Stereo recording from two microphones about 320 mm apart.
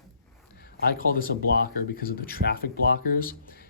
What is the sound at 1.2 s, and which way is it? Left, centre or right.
Speech, left.